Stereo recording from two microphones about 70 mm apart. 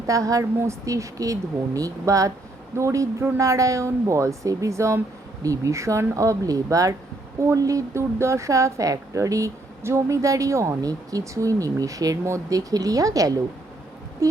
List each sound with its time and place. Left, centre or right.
0.1 s speech: right